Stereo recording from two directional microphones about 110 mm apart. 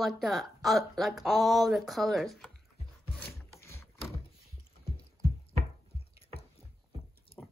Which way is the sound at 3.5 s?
25° left (ahead or behind).